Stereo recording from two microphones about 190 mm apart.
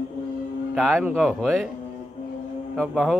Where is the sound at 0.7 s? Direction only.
Centre (ahead or behind).